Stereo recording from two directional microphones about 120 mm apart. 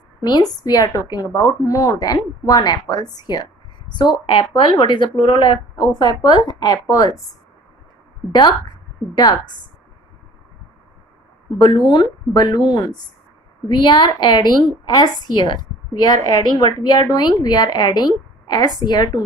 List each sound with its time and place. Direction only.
0.2 s speech: 35° left (ahead or behind)
8.3 s speech: 40° left (ahead or behind)
11.5 s speech: 40° left (ahead or behind)